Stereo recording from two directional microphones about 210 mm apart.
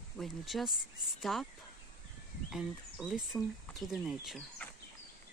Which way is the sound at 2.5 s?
Centre (ahead or behind).